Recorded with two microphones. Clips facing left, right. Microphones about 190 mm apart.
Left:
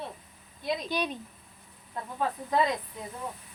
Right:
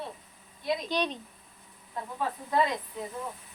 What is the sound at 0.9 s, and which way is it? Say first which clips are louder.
Speech: right 1 dB; 5° left (ahead or behind).